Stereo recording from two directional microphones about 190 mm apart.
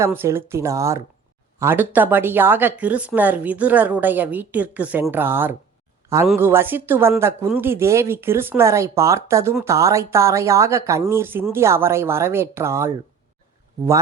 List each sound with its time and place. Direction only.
0.0 s a woman's voice: 15° right (ahead or behind)